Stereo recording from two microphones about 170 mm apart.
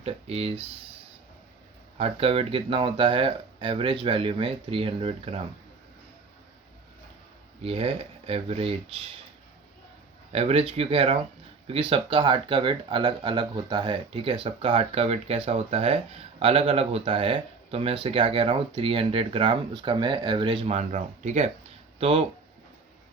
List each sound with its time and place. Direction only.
0.0 s speech: 35° right (ahead or behind)
2.0 s speech: 35° right (ahead or behind)
7.6 s speech: 35° right (ahead or behind)
10.3 s speech: 35° right (ahead or behind)
20.7 s speech: 45° right (ahead or behind)